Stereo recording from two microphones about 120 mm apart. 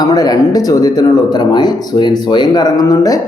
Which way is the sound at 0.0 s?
30° left (ahead or behind).